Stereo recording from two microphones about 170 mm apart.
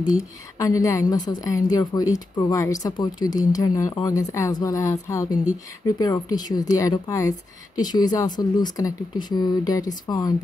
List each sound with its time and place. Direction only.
0.0 s a woman's voice: 20° left (ahead or behind)